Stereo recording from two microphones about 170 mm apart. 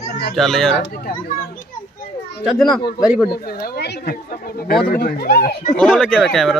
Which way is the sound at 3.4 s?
65° left (ahead or behind).